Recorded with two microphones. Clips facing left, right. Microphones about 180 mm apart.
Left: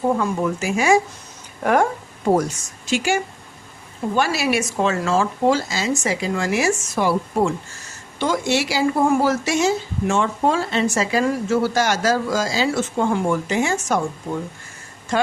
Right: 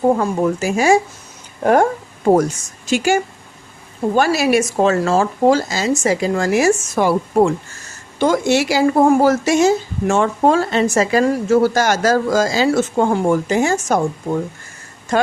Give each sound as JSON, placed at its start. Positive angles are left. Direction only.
{"t": 0.2, "sound": "speech", "side_deg": -40}
{"t": 2.8, "sound": "a woman's voice", "side_deg": -45}
{"t": 15.1, "sound": "a woman's voice", "side_deg": -45}